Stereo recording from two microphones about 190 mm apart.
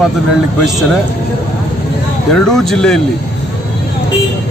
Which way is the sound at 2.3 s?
Centre (ahead or behind).